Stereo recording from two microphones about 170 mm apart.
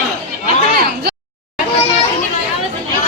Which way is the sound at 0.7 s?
70° right (ahead or behind).